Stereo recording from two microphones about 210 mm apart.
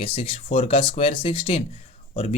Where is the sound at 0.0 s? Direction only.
25° left (ahead or behind).